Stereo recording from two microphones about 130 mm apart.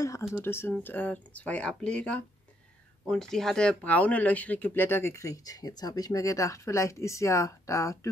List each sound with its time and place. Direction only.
0.0 s speech: 20° left (ahead or behind)